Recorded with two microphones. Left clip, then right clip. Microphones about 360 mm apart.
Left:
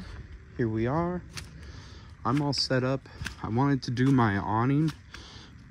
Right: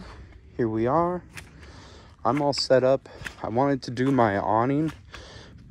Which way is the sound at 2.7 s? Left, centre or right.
Centre.